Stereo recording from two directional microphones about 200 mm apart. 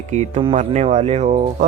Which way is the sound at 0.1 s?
35° right (ahead or behind).